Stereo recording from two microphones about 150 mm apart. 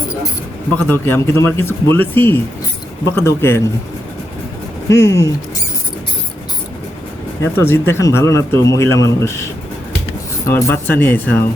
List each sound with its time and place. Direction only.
0.8 s speech: 15° left (ahead or behind)
4.9 s speech: 15° left (ahead or behind)
7.5 s speech: 15° left (ahead or behind)
10.4 s speech: 20° left (ahead or behind)